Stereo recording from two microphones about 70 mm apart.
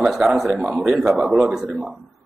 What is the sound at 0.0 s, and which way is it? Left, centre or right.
A man's voice, centre.